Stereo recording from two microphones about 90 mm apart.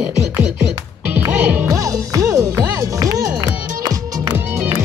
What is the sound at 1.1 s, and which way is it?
Music, 20° right (ahead or behind).